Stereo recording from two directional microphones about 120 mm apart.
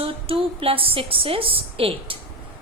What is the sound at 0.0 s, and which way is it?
A woman's voice, 50° right (ahead or behind).